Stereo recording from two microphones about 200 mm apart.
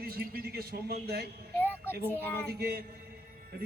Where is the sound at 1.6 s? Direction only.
10° left (ahead or behind).